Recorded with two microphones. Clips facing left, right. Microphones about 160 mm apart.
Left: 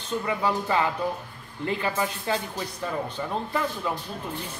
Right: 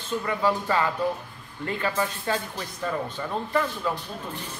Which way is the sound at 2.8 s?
15° left (ahead or behind).